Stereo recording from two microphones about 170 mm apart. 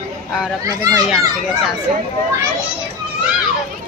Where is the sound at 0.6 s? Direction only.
20° right (ahead or behind).